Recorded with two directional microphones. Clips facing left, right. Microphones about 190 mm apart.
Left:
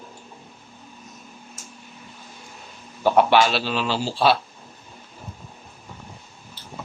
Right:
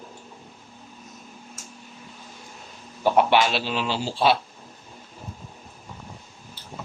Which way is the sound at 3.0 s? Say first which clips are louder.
Left 2 dB; 15° right (ahead or behind).